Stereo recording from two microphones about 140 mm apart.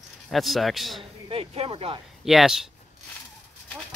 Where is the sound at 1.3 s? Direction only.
40° right (ahead or behind).